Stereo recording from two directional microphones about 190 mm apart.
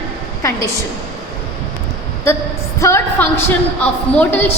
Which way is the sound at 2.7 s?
15° left (ahead or behind).